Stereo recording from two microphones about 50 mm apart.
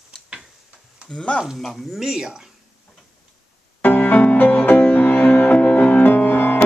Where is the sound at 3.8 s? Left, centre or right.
Left.